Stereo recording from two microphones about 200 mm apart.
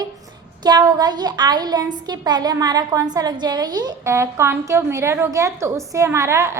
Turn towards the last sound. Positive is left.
turn(degrees=-15)  # may be behind; listen again after turning